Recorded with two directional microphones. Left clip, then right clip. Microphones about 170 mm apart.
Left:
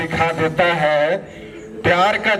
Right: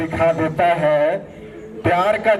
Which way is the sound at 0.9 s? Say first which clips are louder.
Even; 20° left (ahead or behind).